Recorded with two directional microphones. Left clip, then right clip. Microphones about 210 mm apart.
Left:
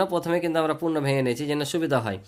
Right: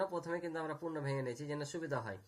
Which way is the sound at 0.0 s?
50° left (ahead or behind).